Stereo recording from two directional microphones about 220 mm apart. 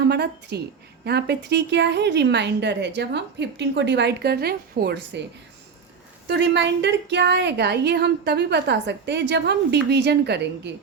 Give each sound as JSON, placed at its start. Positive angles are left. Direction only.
{"t": 0.0, "sound": "a woman's voice", "side_deg": -50}
{"t": 6.2, "sound": "a woman's voice", "side_deg": -50}